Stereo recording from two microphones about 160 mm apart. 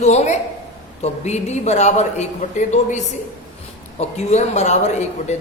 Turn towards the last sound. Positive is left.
turn(degrees=45)  # may be behind; listen again after turning